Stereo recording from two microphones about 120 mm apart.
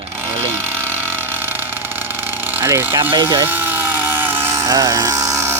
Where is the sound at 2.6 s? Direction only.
20° right (ahead or behind).